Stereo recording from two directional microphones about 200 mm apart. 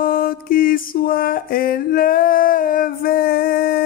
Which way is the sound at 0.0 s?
45° left (ahead or behind).